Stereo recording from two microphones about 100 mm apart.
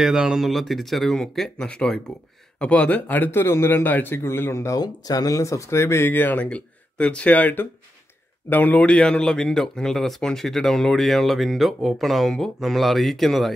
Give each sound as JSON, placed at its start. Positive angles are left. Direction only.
{"t": 0.0, "sound": "a man's voice", "side_deg": -5}